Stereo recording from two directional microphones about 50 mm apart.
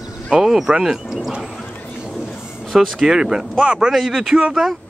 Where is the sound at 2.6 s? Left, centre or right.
Centre.